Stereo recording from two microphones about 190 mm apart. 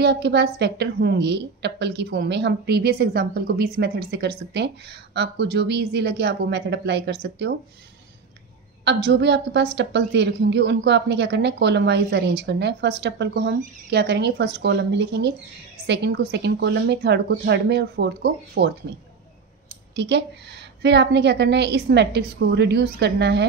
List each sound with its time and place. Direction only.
0.0 s a woman's voice: 60° right (ahead or behind)
8.8 s a woman's voice: 65° right (ahead or behind)
20.0 s a woman's voice: 65° right (ahead or behind)